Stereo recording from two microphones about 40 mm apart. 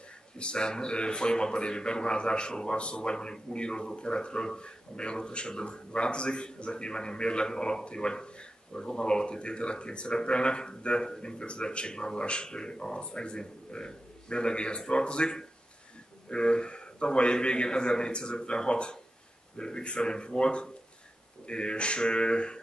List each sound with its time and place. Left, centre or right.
0.4 s a man's voice: left